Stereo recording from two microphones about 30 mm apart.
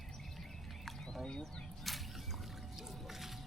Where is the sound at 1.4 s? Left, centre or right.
Centre.